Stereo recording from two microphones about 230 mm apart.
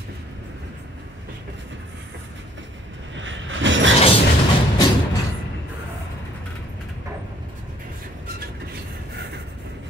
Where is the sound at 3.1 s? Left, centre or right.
Right.